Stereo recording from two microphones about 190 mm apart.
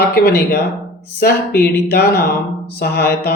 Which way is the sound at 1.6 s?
55° left (ahead or behind).